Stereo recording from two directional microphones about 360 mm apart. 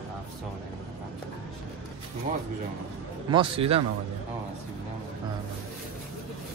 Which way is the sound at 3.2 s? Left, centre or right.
Centre.